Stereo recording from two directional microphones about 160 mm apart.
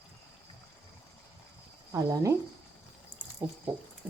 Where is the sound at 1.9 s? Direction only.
20° right (ahead or behind).